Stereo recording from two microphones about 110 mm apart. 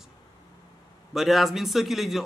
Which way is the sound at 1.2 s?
Centre (ahead or behind).